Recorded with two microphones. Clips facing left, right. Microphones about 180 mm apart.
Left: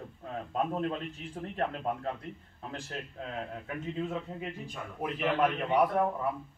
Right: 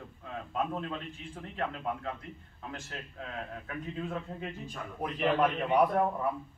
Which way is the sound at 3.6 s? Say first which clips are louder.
Left 3 dB; 20° left (ahead or behind).